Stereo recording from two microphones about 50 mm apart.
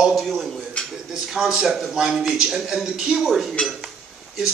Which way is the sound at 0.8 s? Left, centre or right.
Centre.